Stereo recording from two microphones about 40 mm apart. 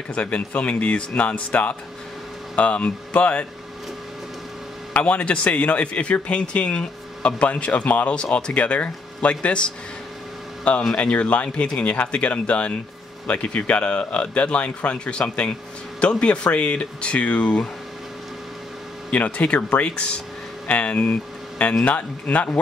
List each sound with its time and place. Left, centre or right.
0.1 s speech: left
5.0 s speech: left
8.1 s speech: left
10.7 s speech: left
19.1 s speech: left